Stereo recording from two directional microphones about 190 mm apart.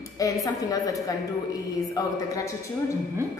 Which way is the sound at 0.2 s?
15° left (ahead or behind).